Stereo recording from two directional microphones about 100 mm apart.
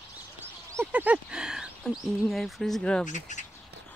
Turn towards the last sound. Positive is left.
turn(degrees=10)  # may be behind; listen again after turning